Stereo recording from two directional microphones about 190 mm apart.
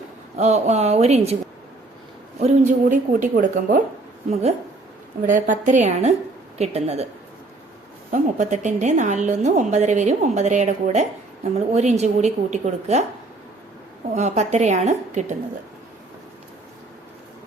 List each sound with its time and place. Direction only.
0.3 s a woman's voice: 35° right (ahead or behind)
2.4 s speech: 40° right (ahead or behind)
5.2 s a woman's voice: 40° right (ahead or behind)
8.1 s a woman's voice: 40° right (ahead or behind)
14.2 s a woman's voice: 35° right (ahead or behind)